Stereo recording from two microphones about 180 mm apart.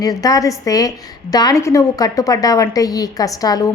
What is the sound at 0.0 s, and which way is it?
A woman's voice, 20° left (ahead or behind).